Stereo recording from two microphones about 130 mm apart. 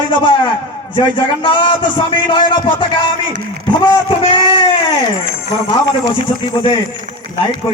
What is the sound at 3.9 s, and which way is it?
Speech, 40° left (ahead or behind).